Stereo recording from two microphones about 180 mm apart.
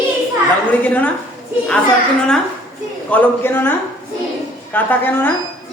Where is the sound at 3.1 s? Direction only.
10° left (ahead or behind).